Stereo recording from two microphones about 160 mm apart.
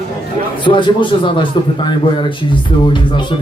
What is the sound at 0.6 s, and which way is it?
Speech, 30° left (ahead or behind).